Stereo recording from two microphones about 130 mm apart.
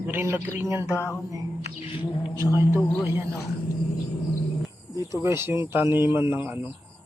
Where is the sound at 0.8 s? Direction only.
20° left (ahead or behind).